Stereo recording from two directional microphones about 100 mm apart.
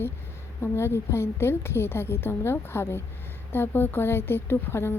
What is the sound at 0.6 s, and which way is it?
A woman's voice, 25° left (ahead or behind).